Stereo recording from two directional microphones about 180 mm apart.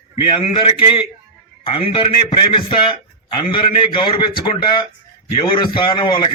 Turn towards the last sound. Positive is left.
turn(degrees=25)  # may be behind; listen again after turning